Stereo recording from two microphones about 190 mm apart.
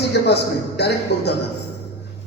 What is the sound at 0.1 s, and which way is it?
Music, 60° left (ahead or behind).